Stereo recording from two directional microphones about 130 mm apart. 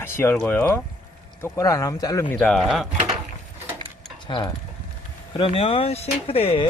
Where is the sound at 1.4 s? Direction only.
25° left (ahead or behind).